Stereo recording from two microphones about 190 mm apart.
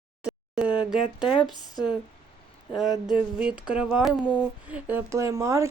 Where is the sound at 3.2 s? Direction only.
5° right (ahead or behind).